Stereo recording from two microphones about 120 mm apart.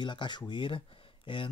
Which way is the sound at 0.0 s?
40° left (ahead or behind).